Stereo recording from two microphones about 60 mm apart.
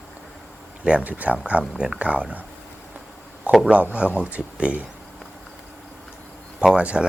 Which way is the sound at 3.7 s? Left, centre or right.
Right.